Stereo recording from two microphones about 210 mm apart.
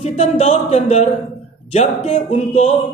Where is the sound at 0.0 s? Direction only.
30° left (ahead or behind).